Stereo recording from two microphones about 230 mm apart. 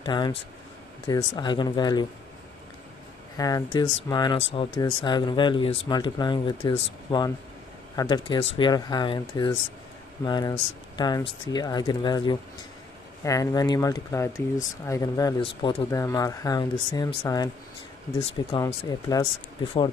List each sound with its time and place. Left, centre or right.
0.0 s speech: centre
3.3 s speech: centre